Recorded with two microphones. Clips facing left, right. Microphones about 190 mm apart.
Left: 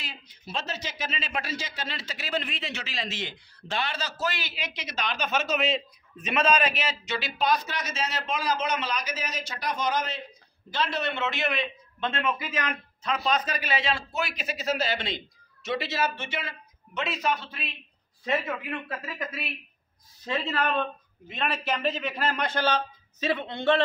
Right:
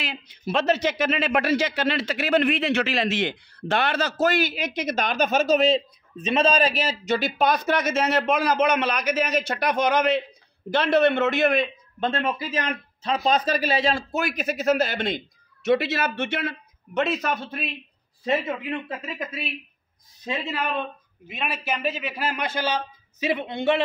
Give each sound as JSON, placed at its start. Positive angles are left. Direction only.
{"t": 0.0, "sound": "a man's voice", "side_deg": -70}
{"t": 18.2, "sound": "a man's voice", "side_deg": -25}